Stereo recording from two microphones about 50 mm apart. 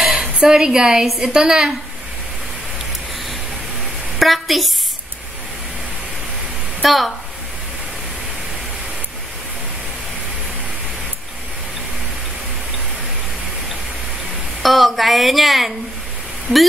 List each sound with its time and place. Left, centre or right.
0.0 s a sound: centre
0.4 s a woman's voice: centre
4.2 s a woman's voice: centre
6.8 s speech: centre
14.6 s a woman's voice: centre